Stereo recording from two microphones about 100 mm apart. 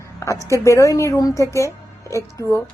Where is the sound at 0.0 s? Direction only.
30° left (ahead or behind).